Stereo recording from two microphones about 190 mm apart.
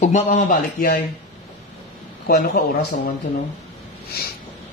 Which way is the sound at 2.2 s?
55° left (ahead or behind).